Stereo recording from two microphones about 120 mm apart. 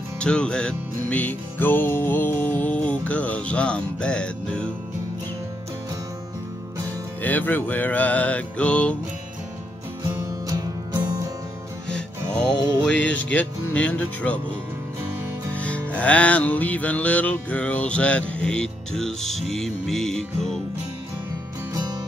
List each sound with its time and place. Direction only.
0.2 s music: 10° left (ahead or behind)
7.2 s music: 15° left (ahead or behind)
10.4 s music: 30° right (ahead or behind)
11.9 s music: 5° left (ahead or behind)
15.5 s music: 10° left (ahead or behind)